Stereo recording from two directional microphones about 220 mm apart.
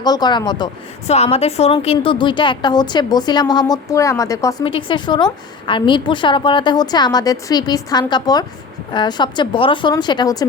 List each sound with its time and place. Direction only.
0.0 s a woman's voice: 20° left (ahead or behind)